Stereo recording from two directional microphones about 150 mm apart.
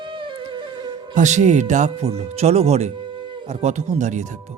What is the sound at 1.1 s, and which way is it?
Speech, 50° right (ahead or behind).